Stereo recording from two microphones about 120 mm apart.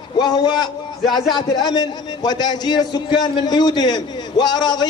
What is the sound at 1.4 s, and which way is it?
A man's voice, 35° left (ahead or behind).